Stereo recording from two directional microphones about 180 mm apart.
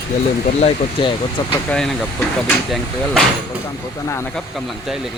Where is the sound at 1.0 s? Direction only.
30° left (ahead or behind).